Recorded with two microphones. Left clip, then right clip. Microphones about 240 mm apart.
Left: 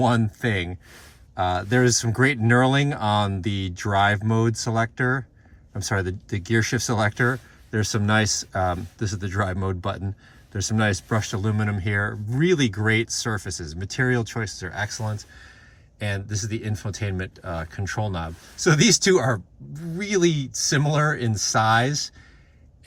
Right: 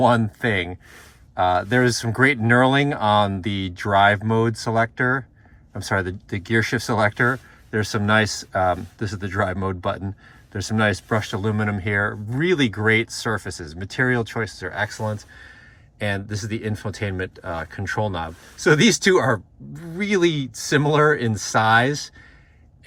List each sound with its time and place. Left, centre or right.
0.0 s speech: left